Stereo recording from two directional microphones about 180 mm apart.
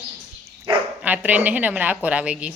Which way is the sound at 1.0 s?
10° right (ahead or behind).